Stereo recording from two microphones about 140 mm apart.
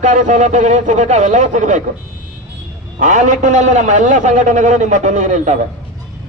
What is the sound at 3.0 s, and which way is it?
A man's voice, 65° right (ahead or behind).